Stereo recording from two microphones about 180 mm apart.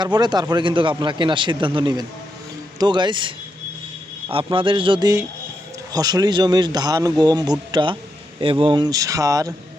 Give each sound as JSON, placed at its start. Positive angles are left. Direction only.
{"t": 0.0, "sound": "speech", "side_deg": -25}